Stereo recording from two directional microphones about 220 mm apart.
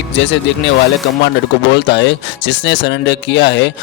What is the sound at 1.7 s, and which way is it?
Speech, 50° left (ahead or behind).